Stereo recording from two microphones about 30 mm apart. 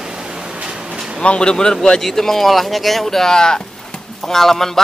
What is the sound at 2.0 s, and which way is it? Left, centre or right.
Speech, centre.